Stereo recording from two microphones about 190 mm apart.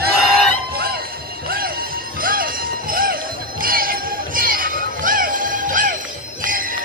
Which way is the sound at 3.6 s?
50° right (ahead or behind).